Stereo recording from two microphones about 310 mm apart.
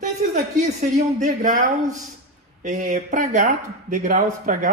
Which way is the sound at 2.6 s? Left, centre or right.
Right.